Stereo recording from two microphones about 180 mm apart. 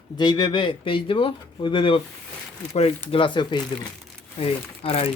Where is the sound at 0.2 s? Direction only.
25° left (ahead or behind).